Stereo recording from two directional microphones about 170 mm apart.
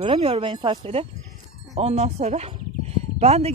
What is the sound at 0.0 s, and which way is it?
Speech, 35° right (ahead or behind).